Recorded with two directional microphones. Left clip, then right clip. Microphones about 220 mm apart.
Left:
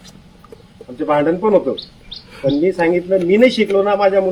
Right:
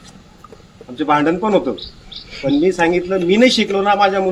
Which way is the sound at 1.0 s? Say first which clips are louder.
Even; 20° right (ahead or behind).